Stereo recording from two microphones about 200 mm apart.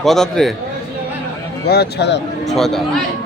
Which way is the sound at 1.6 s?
55° left (ahead or behind).